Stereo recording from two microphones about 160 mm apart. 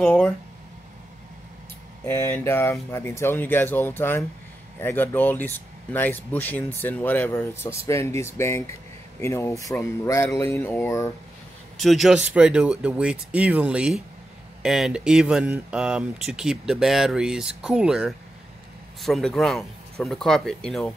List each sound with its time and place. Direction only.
0.0 s speech: 5° left (ahead or behind)
2.0 s speech: 10° left (ahead or behind)
11.7 s speech: centre (ahead or behind)